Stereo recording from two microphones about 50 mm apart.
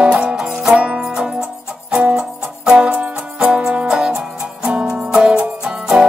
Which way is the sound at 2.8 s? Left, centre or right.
Right.